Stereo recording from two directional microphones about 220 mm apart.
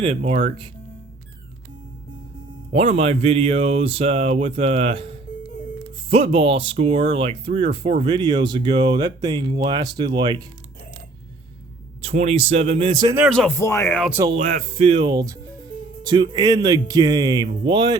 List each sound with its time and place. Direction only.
0.0 s speech: 30° right (ahead or behind)
2.7 s speech: 30° right (ahead or behind)
12.0 s speech: 30° right (ahead or behind)
13.2 s speech: centre (ahead or behind)
13.6 s speech: 15° left (ahead or behind)
14.0 s speech: 5° right (ahead or behind)
14.3 s speech: 30° right (ahead or behind)